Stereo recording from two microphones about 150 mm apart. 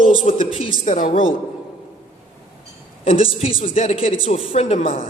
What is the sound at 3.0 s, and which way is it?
A woman's voice, 40° left (ahead or behind).